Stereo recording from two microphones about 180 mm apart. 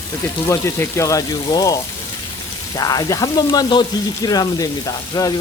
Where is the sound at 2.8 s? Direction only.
20° left (ahead or behind).